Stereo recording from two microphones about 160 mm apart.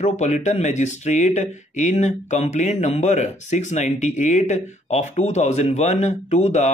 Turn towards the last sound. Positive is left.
turn(degrees=45)  # may be behind; listen again after turning